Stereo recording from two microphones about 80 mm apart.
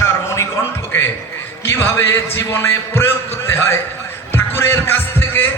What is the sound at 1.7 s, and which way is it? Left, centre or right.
Speech, left.